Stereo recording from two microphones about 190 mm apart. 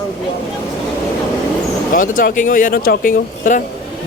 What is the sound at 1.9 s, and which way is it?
Speech, 45° left (ahead or behind).